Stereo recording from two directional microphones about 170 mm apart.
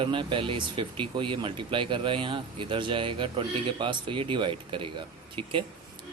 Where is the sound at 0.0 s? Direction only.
30° right (ahead or behind).